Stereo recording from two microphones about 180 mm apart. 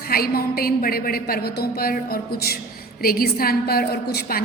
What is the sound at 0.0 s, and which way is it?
A woman's voice, 55° left (ahead or behind).